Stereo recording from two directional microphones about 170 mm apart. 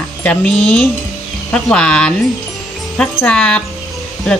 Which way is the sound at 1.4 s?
5° left (ahead or behind).